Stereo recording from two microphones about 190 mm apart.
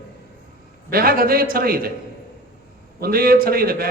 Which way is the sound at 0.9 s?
50° right (ahead or behind).